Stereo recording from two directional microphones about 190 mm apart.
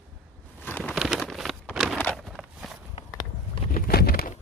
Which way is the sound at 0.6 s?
10° left (ahead or behind).